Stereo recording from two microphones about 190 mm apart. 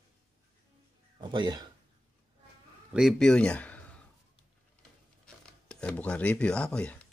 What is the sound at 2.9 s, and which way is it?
Speech, centre (ahead or behind).